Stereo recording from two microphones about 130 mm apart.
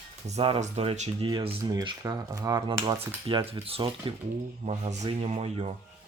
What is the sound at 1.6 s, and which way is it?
Speech, 30° right (ahead or behind).